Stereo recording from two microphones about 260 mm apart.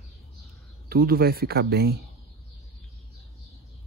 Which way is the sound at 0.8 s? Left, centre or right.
Right.